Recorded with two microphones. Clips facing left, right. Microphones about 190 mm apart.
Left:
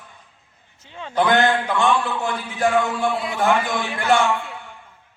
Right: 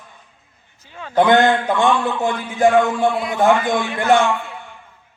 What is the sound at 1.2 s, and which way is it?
A man's voice, 20° right (ahead or behind).